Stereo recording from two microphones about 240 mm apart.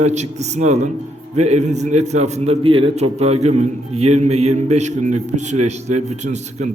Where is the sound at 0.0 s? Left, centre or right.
Right.